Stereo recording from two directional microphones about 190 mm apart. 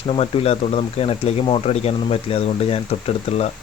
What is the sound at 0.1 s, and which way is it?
Speech, 30° left (ahead or behind).